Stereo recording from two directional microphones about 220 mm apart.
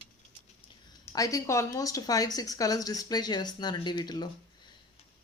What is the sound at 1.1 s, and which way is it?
A woman's voice, 15° left (ahead or behind).